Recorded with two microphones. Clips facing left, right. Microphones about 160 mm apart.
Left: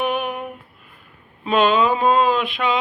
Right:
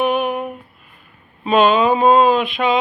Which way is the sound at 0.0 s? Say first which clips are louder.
Right 5 dB; 5° right (ahead or behind).